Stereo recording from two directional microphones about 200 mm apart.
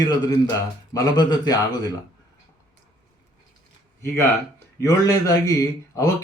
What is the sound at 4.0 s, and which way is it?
Speech, 15° left (ahead or behind).